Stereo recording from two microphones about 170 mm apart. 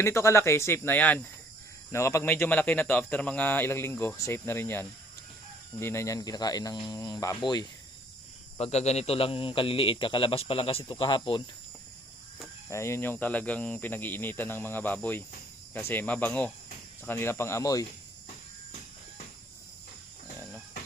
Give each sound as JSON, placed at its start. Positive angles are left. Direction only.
{"t": 0.0, "sound": "speech", "side_deg": 15}
{"t": 8.5, "sound": "speech", "side_deg": 40}
{"t": 12.7, "sound": "speech", "side_deg": 15}